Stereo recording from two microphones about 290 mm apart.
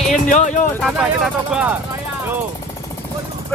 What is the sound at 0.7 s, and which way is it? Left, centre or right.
Speech, centre.